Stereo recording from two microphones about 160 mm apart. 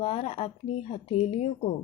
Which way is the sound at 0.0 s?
40° left (ahead or behind).